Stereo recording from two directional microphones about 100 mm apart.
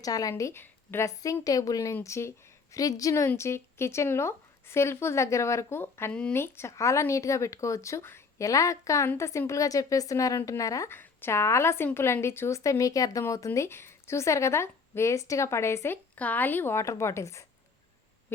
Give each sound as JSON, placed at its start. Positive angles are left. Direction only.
{"t": 0.0, "sound": "speech", "side_deg": 35}
{"t": 6.1, "sound": "speech", "side_deg": 10}
{"t": 6.3, "sound": "a woman's voice", "side_deg": 25}
{"t": 16.1, "sound": "speech", "side_deg": 15}